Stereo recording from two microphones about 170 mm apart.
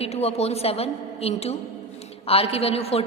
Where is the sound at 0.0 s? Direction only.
35° left (ahead or behind).